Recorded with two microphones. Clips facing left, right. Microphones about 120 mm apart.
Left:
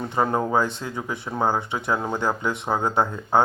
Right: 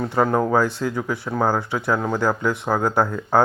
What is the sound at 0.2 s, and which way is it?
Speech, 15° left (ahead or behind).